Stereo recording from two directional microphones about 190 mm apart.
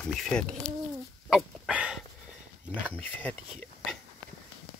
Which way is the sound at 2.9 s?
10° left (ahead or behind).